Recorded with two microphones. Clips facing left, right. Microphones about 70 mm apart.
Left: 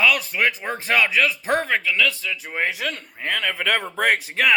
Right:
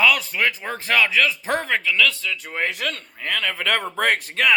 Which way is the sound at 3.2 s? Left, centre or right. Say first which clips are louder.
Left 1 dB; left.